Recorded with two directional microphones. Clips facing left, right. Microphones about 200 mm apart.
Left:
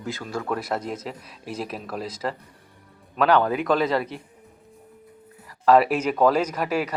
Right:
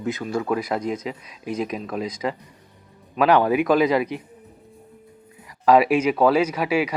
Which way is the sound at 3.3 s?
15° right (ahead or behind).